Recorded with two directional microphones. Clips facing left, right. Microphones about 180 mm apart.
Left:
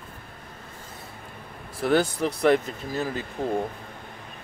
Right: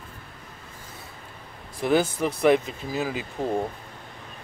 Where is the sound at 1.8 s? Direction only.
5° right (ahead or behind).